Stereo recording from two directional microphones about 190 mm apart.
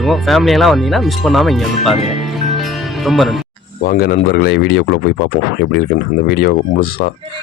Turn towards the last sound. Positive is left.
turn(degrees=55)  # may be behind; listen again after turning